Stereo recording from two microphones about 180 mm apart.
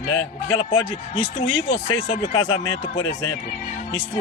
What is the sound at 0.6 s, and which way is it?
Speech, 25° left (ahead or behind).